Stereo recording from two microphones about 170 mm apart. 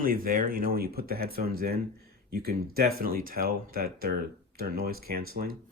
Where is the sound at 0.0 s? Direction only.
55° right (ahead or behind).